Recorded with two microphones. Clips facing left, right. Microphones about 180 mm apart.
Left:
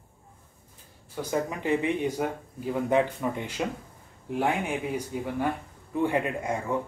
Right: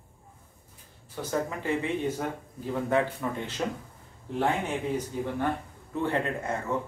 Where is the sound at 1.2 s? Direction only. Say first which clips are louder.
Left 1 dB; 15° left (ahead or behind).